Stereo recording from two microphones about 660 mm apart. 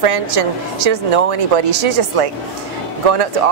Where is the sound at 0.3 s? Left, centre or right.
Right.